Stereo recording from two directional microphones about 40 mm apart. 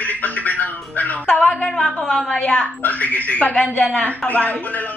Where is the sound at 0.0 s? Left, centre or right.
Left.